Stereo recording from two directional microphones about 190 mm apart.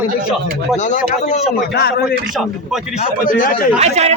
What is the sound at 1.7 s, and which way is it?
Speech, 60° left (ahead or behind).